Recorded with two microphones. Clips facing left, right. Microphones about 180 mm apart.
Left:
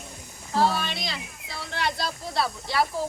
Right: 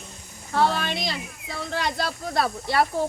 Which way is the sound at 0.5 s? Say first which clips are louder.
Right 1 dB; 55° right (ahead or behind).